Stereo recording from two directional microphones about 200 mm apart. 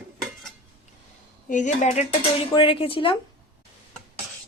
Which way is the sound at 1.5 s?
40° left (ahead or behind).